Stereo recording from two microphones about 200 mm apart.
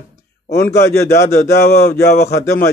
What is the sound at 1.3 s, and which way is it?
Speech, 50° left (ahead or behind).